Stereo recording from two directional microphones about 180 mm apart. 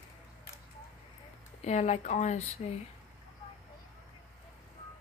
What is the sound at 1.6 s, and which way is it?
Speech, 35° left (ahead or behind).